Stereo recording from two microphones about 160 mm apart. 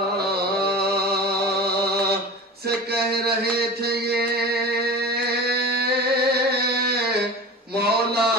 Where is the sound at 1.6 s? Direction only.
80° right.